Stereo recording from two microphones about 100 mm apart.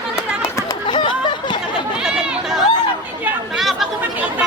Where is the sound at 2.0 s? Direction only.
5° right (ahead or behind).